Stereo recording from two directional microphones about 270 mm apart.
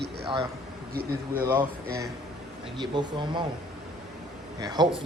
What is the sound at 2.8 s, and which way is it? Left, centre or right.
Speech, centre.